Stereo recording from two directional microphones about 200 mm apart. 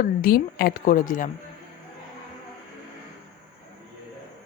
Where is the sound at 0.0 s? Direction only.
45° left (ahead or behind).